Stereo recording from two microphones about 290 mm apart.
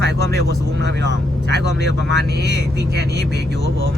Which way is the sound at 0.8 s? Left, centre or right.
Right.